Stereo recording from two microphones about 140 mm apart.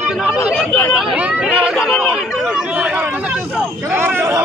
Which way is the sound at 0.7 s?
15° left (ahead or behind).